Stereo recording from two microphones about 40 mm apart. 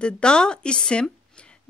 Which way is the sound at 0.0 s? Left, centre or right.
Left.